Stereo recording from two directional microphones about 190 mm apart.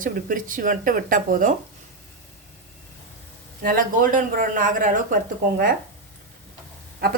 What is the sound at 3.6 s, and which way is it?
Speech, 50° right (ahead or behind).